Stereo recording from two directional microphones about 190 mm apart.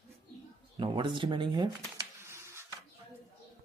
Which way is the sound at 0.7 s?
25° right (ahead or behind).